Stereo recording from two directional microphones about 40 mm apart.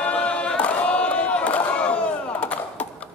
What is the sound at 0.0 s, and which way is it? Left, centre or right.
Crowd, left.